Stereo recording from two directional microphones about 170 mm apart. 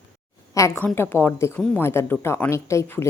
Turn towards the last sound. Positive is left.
turn(degrees=15)  # may be behind; listen again after turning